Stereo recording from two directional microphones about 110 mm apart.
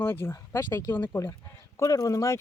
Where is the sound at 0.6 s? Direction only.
30° left (ahead or behind).